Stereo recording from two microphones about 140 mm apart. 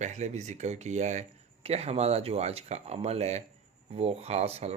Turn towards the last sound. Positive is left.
turn(degrees=-50)  # may be behind; listen again after turning